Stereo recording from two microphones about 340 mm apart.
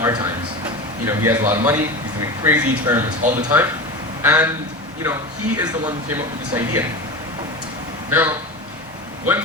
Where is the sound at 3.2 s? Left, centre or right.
Right.